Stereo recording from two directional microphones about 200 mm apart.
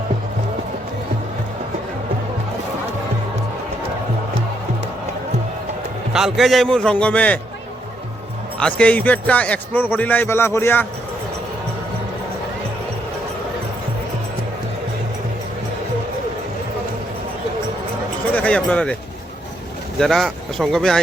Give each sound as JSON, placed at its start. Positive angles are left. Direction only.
{"t": 6.1, "sound": "a man's voice", "side_deg": 0}
{"t": 8.5, "sound": "a man's voice", "side_deg": 5}
{"t": 18.3, "sound": "speech", "side_deg": 5}
{"t": 20.0, "sound": "a man's voice", "side_deg": 0}